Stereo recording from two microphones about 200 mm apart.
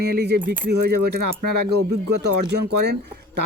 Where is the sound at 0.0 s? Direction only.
55° right (ahead or behind).